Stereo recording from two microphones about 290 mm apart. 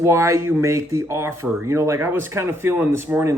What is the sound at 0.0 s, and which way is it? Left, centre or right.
Speech, centre.